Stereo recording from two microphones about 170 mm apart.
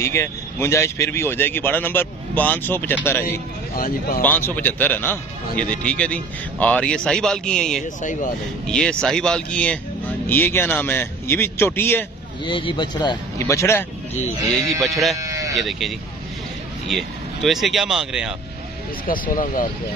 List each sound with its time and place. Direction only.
0.0 s a man's voice: 15° left (ahead or behind)
3.7 s speech: 55° left (ahead or behind)
4.2 s a man's voice: 10° left (ahead or behind)
8.0 s speech: 50° left (ahead or behind)
8.6 s a man's voice: 5° left (ahead or behind)
12.4 s speech: 30° left (ahead or behind)
15.1 s sheep: 20° right (ahead or behind)
15.5 s speech: centre (ahead or behind)
19.2 s speech: 55° left (ahead or behind)